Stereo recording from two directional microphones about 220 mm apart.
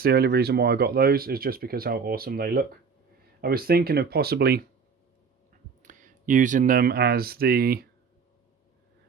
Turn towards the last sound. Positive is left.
turn(degrees=-45)  # may be behind; listen again after turning